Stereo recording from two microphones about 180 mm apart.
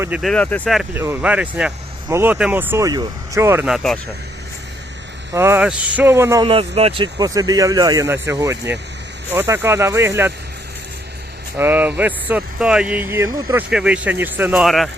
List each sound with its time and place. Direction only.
0.2 s speech: 5° left (ahead or behind)
0.9 s speech: 10° right (ahead or behind)
3.7 s speech: 5° left (ahead or behind)
5.3 s speech: 15° right (ahead or behind)
6.4 s speech: 30° right (ahead or behind); by 10.3 s 15° right (ahead or behind)
11.5 s speech: 10° right (ahead or behind)
13.7 s speech: 5° right (ahead or behind)